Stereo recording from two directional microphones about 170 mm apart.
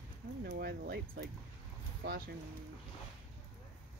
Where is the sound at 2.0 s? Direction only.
90° right.